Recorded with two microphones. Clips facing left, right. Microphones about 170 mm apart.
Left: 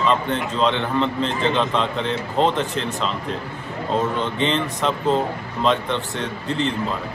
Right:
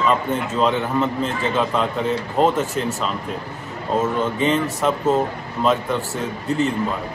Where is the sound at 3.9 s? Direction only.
5° right (ahead or behind).